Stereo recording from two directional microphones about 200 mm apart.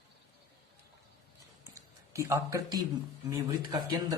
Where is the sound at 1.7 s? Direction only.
15° right (ahead or behind).